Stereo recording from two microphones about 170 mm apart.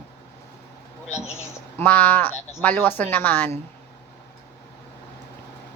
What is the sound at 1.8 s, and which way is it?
Speech, 10° left (ahead or behind).